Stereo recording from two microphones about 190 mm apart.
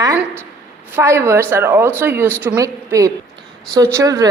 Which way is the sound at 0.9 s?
15° right (ahead or behind).